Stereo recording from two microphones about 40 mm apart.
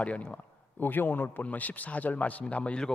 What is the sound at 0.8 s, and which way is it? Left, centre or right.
Speech, left.